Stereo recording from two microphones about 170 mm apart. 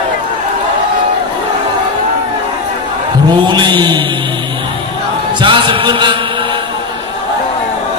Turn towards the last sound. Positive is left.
turn(degrees=-30)  # may be behind; listen again after turning